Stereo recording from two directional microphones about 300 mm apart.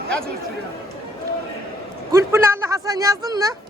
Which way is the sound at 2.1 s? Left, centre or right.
Centre.